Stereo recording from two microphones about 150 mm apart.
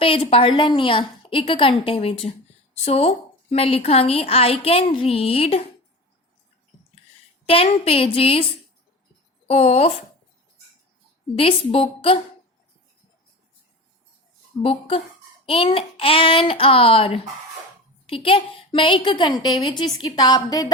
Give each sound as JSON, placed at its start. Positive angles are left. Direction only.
{"t": 0.0, "sound": "a woman's voice", "side_deg": 40}
{"t": 7.4, "sound": "a woman's voice", "side_deg": 40}
{"t": 9.5, "sound": "speech", "side_deg": 45}
{"t": 11.3, "sound": "a woman's voice", "side_deg": 40}
{"t": 14.6, "sound": "a woman's voice", "side_deg": 40}